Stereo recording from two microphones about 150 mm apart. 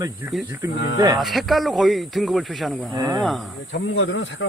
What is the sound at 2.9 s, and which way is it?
Speech, 20° right (ahead or behind).